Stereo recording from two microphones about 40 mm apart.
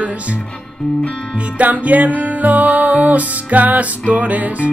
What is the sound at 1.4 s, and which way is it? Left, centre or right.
Music, right.